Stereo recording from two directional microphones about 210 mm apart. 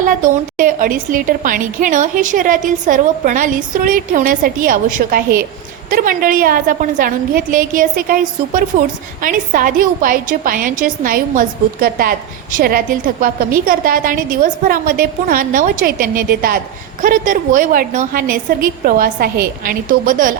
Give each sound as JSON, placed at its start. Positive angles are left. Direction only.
{"t": 0.5, "sound": "a woman's voice", "side_deg": -40}